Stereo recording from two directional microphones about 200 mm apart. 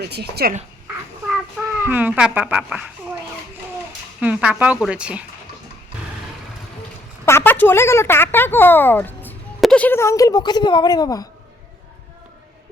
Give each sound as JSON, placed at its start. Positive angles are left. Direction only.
{"t": 0.0, "sound": "speech", "side_deg": -55}
{"t": 1.3, "sound": "a child's voice", "side_deg": -10}
{"t": 4.2, "sound": "a woman's voice", "side_deg": -5}
{"t": 7.3, "sound": "speech", "side_deg": 10}